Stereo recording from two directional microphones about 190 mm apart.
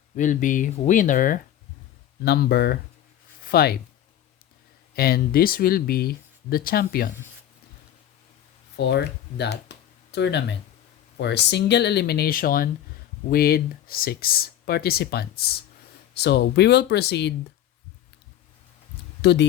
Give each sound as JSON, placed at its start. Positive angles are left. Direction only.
{"t": 0.2, "sound": "speech", "side_deg": 40}
{"t": 2.2, "sound": "speech", "side_deg": 60}
{"t": 4.9, "sound": "speech", "side_deg": 55}
{"t": 8.7, "sound": "speech", "side_deg": 60}
{"t": 19.2, "sound": "speech", "side_deg": 60}